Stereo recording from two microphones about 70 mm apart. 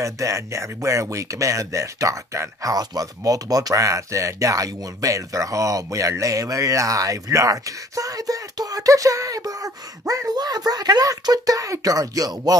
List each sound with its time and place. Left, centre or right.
0.0 s speech: right